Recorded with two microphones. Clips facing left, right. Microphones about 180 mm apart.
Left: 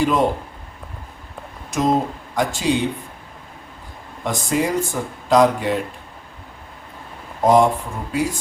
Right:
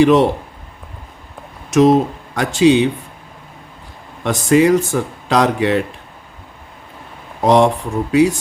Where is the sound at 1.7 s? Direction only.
75° right (ahead or behind).